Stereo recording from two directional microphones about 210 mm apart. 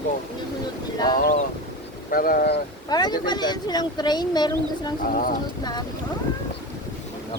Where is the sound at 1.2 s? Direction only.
40° left (ahead or behind).